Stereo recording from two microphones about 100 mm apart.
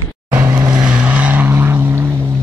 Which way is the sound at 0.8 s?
10° right (ahead or behind).